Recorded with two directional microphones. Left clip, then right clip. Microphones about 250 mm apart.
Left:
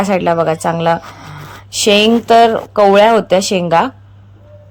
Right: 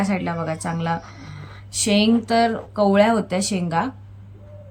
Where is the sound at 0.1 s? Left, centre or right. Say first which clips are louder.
Left 13 dB; left.